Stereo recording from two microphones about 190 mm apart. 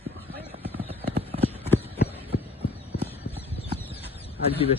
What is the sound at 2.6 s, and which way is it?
Clip-clop, 30° left (ahead or behind).